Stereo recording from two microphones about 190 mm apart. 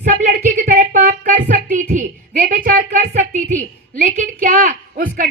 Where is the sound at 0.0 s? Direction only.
45° right (ahead or behind).